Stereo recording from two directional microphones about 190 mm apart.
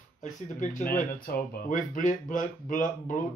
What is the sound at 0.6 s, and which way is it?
Speech, 45° left (ahead or behind).